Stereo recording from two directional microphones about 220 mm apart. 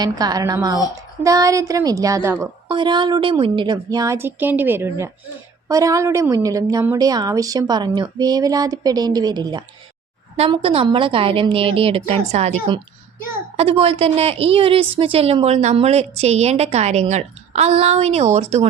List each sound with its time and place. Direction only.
0.0 s a woman's voice: 15° right (ahead or behind)